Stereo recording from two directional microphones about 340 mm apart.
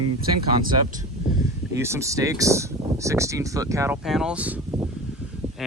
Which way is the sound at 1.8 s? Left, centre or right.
Centre.